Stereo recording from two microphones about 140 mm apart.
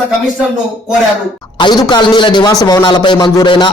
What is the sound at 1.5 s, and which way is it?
A man's voice, 30° left (ahead or behind).